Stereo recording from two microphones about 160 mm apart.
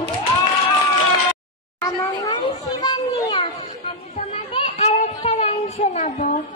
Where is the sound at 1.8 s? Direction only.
25° left (ahead or behind).